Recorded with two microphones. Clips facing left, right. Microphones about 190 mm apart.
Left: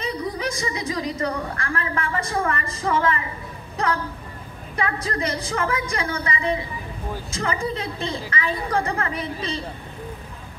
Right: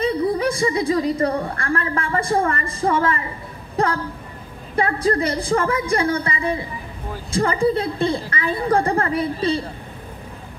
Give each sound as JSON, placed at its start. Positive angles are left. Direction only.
{"t": 0.0, "sound": "a woman's voice", "side_deg": -30}